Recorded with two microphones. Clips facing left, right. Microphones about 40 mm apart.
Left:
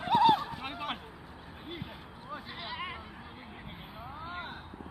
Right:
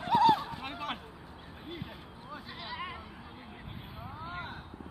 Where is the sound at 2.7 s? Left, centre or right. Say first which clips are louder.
Even; centre.